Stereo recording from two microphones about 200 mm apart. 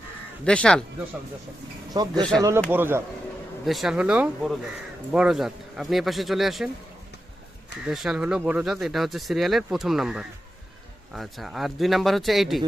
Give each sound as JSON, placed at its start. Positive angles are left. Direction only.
{"t": 0.4, "sound": "speech", "side_deg": 5}
{"t": 1.9, "sound": "speech", "side_deg": -20}
{"t": 2.6, "sound": "speech", "side_deg": -10}
{"t": 7.9, "sound": "speech", "side_deg": -5}